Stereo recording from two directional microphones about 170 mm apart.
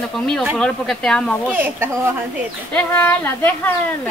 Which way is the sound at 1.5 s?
10° right (ahead or behind).